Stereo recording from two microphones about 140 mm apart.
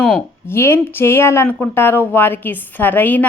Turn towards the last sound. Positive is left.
turn(degrees=10)  # may be behind; listen again after turning